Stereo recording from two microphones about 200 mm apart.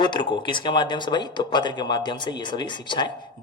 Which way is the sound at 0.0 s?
25° left (ahead or behind).